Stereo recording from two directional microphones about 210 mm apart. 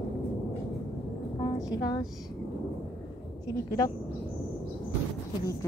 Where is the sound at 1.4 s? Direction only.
15° left (ahead or behind).